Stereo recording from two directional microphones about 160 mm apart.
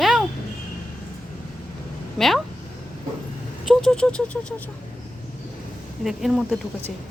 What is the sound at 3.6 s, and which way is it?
Patter, centre (ahead or behind).